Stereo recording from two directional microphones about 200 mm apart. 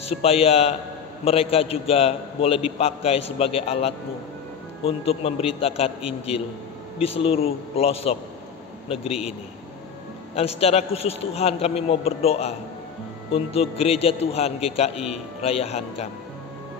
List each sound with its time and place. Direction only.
0.2 s a man's voice: 30° left (ahead or behind)
10.3 s a man's voice: 30° left (ahead or behind)